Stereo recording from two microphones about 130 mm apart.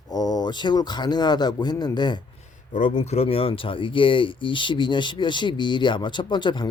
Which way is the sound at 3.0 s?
55° left (ahead or behind).